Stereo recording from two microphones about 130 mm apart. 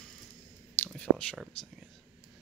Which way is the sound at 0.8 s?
15° left (ahead or behind).